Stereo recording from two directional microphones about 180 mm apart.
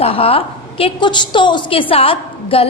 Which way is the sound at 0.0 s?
30° left (ahead or behind).